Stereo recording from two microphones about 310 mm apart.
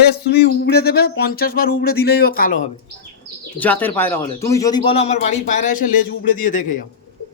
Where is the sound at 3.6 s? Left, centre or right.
Centre; by 6.8 s left.